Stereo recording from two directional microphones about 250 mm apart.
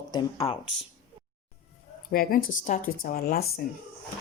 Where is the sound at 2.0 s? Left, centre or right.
Left.